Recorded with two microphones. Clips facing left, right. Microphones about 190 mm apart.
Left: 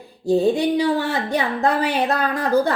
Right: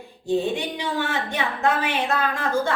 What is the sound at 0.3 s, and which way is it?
A woman's voice, 35° left (ahead or behind).